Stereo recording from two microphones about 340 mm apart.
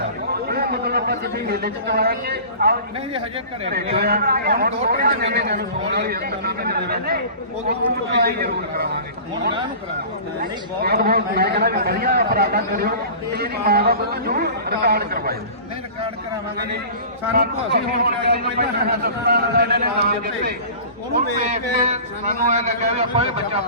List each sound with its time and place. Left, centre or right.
0.0 s a sound: right
3.1 s speech: centre
3.7 s a man's voice: right
10.4 s a man's voice: right
17.3 s a man's voice: right